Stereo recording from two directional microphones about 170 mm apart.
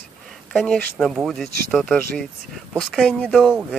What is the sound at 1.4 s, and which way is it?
Speech, 60° right (ahead or behind).